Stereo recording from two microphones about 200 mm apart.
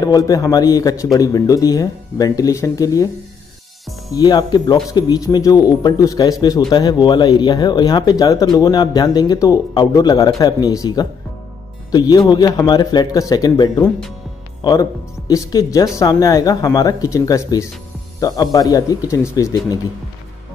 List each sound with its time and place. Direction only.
0.0 s a man's voice: 20° left (ahead or behind)
4.1 s a man's voice: 20° left (ahead or behind)